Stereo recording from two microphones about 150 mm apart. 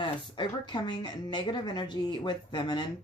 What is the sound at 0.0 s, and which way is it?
Speech, 30° left (ahead or behind).